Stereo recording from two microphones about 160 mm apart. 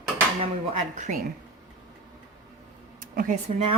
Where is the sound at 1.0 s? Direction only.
50° right (ahead or behind).